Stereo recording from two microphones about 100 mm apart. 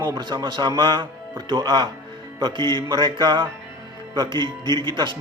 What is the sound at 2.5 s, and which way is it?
Music, 40° left (ahead or behind).